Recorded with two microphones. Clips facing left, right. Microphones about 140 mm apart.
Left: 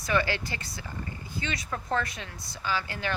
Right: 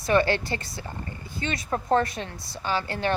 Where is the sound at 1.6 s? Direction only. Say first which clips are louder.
Right 9 dB; 40° right (ahead or behind).